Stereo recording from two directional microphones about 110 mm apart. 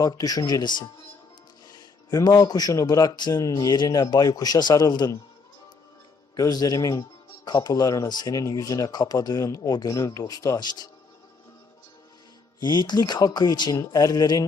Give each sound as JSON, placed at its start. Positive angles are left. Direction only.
{"t": 0.0, "sound": "speech", "side_deg": 35}
{"t": 6.3, "sound": "speech", "side_deg": 35}
{"t": 12.5, "sound": "speech", "side_deg": 40}